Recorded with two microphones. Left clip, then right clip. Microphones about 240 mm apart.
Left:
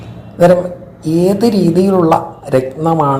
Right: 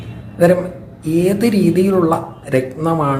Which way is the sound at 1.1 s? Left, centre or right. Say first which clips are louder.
Left 3 dB; centre.